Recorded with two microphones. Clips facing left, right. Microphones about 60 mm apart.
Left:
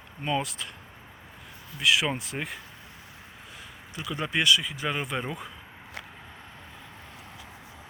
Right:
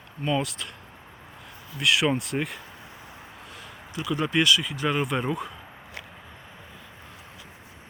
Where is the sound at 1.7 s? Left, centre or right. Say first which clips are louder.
Right 2 dB; centre.